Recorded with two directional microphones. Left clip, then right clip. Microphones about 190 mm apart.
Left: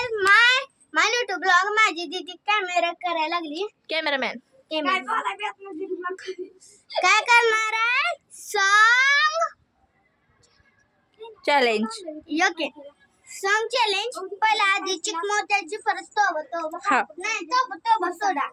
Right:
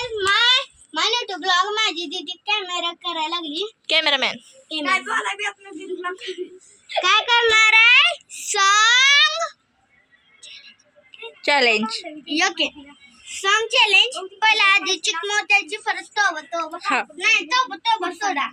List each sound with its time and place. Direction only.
0.0 s a sound: 10° left (ahead or behind)
3.8 s a child's voice: 10° left (ahead or behind)
4.9 s a woman's voice: 55° right (ahead or behind)
7.0 s a child's voice: 20° left (ahead or behind)
7.5 s a child's voice: 10° left (ahead or behind)
11.4 s a child's voice: 5° left (ahead or behind)
14.3 s a child's voice: 15° left (ahead or behind)